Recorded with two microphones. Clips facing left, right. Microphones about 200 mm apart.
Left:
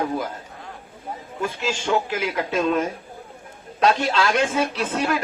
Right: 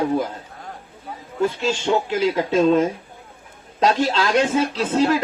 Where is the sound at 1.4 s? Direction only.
30° right (ahead or behind).